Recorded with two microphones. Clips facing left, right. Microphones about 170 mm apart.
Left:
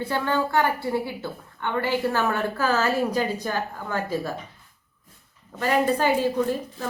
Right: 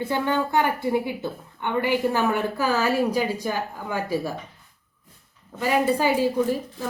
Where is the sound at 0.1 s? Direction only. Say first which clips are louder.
Even; 15° right (ahead or behind).